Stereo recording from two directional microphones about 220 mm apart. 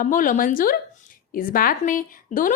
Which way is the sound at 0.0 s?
35° left (ahead or behind).